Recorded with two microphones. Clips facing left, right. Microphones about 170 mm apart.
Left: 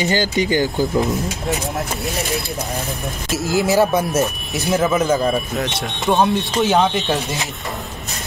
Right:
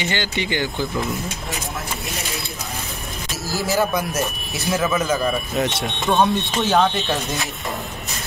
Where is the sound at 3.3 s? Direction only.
20° left (ahead or behind).